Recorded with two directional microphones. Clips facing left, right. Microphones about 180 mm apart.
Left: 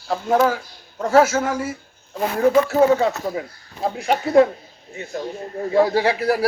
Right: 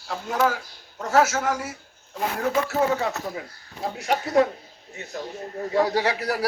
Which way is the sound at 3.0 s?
25° left (ahead or behind).